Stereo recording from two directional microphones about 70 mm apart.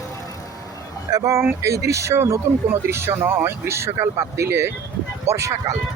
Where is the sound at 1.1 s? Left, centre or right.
Right.